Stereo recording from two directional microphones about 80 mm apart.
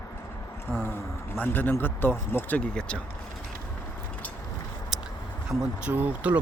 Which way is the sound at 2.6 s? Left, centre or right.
Centre.